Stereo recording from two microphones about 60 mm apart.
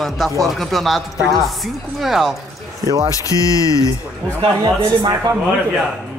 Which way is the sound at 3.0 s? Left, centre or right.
Left.